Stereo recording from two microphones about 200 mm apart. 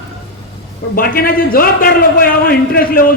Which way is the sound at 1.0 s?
45° left (ahead or behind).